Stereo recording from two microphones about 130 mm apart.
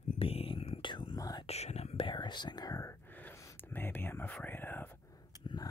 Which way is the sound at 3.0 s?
15° left (ahead or behind).